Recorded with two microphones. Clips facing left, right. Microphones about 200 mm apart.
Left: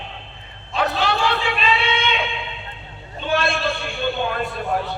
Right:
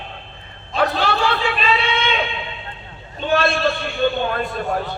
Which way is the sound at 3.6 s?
50° right (ahead or behind).